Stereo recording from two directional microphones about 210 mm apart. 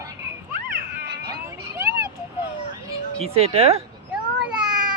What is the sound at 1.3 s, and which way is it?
Vehicle, 10° right (ahead or behind).